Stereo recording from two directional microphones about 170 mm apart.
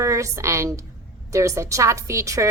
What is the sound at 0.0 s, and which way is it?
A woman's voice, 15° right (ahead or behind).